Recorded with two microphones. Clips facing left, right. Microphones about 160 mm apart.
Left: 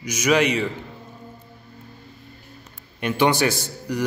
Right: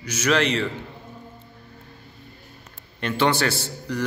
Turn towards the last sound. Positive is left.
turn(degrees=15)  # may be behind; listen again after turning